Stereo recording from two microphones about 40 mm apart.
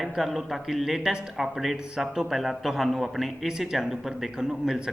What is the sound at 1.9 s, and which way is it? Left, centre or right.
Speech, centre.